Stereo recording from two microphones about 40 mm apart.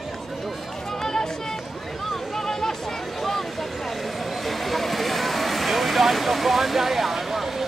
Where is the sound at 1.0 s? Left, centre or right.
Centre.